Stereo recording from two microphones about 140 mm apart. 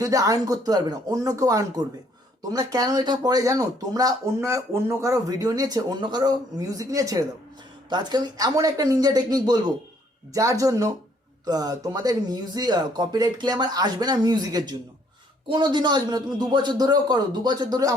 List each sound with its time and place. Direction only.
0.0 s a man's voice: 25° right (ahead or behind)